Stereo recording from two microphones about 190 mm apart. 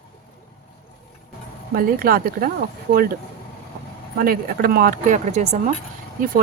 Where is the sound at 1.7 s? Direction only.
50° right (ahead or behind).